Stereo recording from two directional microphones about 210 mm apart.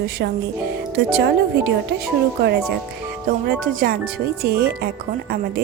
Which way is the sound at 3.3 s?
45° right (ahead or behind).